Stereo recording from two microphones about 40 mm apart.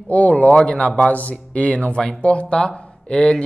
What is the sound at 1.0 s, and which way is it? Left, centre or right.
Speech, left.